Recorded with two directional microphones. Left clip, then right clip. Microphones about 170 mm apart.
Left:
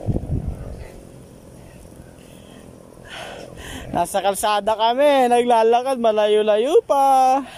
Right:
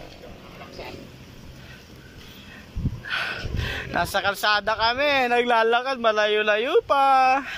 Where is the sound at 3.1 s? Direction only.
35° left (ahead or behind).